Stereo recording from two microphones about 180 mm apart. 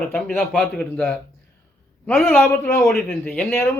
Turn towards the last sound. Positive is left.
turn(degrees=10)  # may be behind; listen again after turning